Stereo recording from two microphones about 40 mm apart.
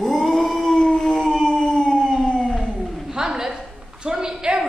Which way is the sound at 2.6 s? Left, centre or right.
Centre.